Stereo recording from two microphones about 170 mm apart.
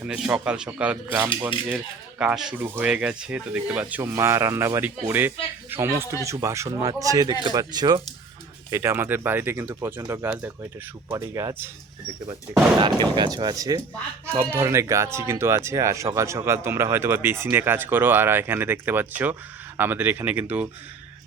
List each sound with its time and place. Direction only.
0.0 s speech: 5° right (ahead or behind)
12.8 s speech: 25° right (ahead or behind); by 20.4 s 10° right (ahead or behind)